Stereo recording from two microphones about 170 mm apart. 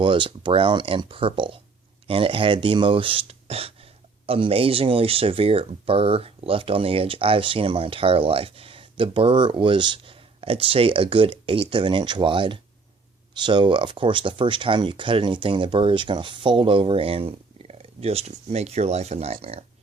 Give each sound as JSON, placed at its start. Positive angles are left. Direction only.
{"t": 0.0, "sound": "speech", "side_deg": -30}